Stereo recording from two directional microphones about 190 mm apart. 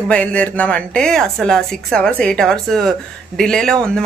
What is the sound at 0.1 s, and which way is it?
Speech, 5° left (ahead or behind).